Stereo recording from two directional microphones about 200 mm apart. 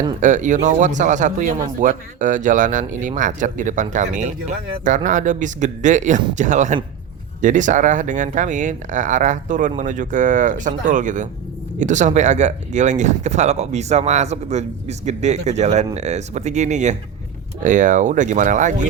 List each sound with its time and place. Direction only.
0.2 s speech: 40° right (ahead or behind)